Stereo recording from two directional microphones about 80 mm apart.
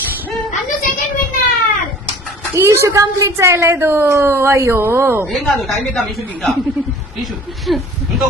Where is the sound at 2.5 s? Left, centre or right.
Right.